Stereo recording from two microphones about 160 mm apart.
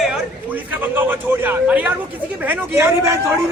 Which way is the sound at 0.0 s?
5° right (ahead or behind).